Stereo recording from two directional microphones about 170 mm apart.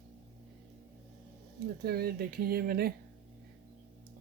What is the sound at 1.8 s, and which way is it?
Speech, 65° right (ahead or behind).